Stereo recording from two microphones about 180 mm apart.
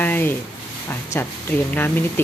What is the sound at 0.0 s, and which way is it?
Speech, 10° left (ahead or behind).